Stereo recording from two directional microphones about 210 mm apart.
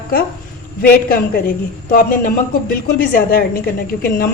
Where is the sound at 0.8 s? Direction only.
45° left (ahead or behind).